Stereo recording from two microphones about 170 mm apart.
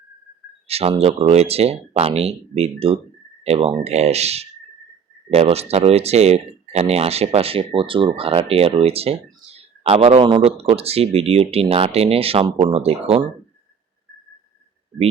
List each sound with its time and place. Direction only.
0.7 s speech: 35° right (ahead or behind)